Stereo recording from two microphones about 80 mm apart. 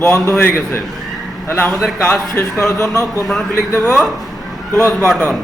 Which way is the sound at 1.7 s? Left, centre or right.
Centre.